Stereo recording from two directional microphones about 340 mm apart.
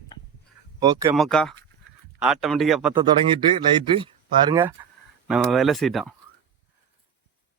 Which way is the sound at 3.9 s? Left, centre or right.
Centre.